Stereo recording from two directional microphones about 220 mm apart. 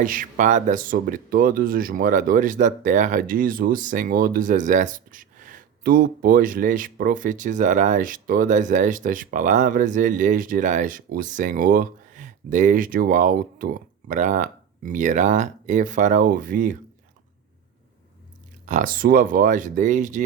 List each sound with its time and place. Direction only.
0.0 s speech: 40° right (ahead or behind)
18.6 s speech: 35° right (ahead or behind)